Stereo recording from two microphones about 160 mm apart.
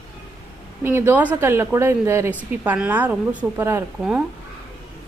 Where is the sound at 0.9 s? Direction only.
10° right (ahead or behind).